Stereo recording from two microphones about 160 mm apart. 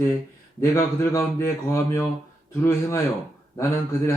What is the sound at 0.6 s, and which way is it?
A man's voice, 20° left (ahead or behind).